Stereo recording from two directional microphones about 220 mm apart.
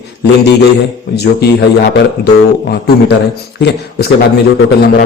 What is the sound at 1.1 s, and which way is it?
A man's voice, 50° left (ahead or behind).